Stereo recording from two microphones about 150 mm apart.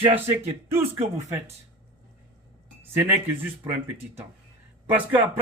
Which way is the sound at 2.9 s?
15° right (ahead or behind).